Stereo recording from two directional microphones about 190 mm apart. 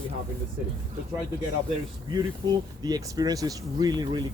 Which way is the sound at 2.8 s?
20° right (ahead or behind).